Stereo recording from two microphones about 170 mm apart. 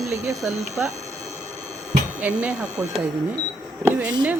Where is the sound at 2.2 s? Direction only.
5° right (ahead or behind).